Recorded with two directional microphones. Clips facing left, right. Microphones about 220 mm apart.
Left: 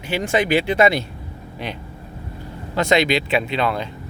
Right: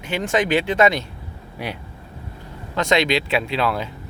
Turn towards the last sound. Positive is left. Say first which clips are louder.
# left 1 dB
turn(degrees=-5)  # may be behind; listen again after turning